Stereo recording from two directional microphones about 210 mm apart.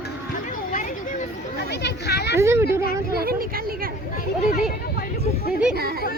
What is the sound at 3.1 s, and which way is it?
Speech, 45° right (ahead or behind).